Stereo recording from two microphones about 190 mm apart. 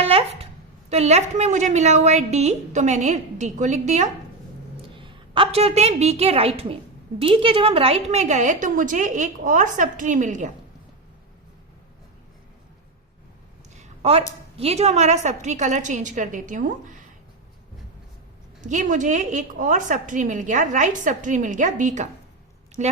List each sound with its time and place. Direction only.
0.0 s a sound: 30° right (ahead or behind)
0.9 s a woman's voice: 35° right (ahead or behind)
4.8 s a woman's voice: 25° right (ahead or behind)
13.8 s a sound: 30° right (ahead or behind)
14.6 s a woman's voice: 35° right (ahead or behind)
18.6 s a woman's voice: 40° right (ahead or behind)